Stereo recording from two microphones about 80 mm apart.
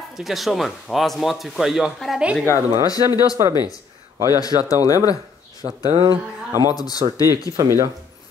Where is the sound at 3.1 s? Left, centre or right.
Left.